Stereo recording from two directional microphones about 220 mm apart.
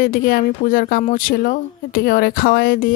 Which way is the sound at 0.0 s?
40° left (ahead or behind).